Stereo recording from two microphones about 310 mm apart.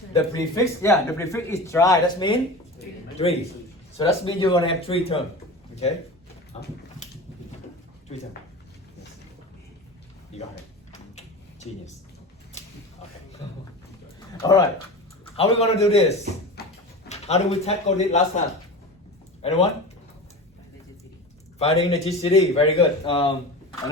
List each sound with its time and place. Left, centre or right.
0.1 s a man's voice: centre
6.5 s a man's voice: left
11.1 s a sound: left
14.4 s a man's voice: centre
16.6 s a sound: left
17.1 s a man's voice: left
19.4 s speech: centre
21.6 s a man's voice: centre